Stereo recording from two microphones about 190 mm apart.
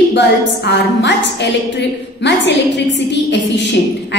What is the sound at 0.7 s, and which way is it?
A woman's voice, 65° left (ahead or behind).